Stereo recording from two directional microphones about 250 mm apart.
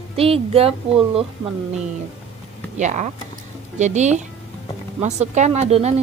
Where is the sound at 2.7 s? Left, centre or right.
Right.